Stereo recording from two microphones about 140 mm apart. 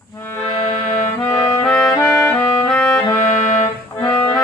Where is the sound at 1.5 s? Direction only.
10° left (ahead or behind).